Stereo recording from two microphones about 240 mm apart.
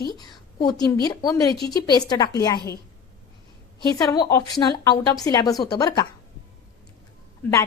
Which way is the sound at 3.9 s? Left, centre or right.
Centre.